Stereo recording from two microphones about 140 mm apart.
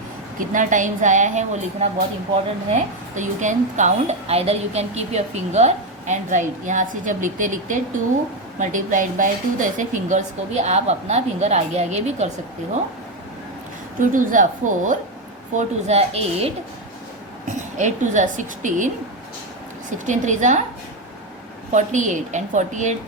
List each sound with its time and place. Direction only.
0.3 s a woman's voice: 70° right (ahead or behind); by 12.3 s 55° right (ahead or behind)
14.0 s a woman's voice: 70° right (ahead or behind)
15.5 s a woman's voice: 50° right (ahead or behind)
17.5 s a woman's voice: 60° right (ahead or behind)
20.1 s a woman's voice: 60° right (ahead or behind)
21.7 s a woman's voice: 60° right (ahead or behind)